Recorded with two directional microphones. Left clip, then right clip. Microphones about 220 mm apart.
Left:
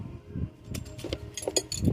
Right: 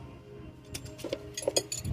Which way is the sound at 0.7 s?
30° left (ahead or behind).